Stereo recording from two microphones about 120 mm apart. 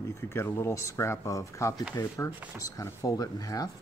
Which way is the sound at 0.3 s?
20° left (ahead or behind).